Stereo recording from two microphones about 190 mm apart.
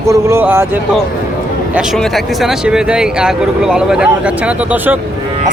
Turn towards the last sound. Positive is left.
turn(degrees=-10)  # may be behind; listen again after turning